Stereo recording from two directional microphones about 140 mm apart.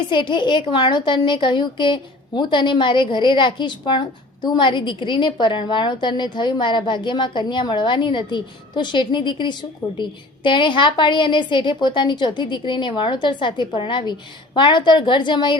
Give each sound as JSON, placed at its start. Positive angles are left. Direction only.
{"t": 0.1, "sound": "a woman's voice", "side_deg": 35}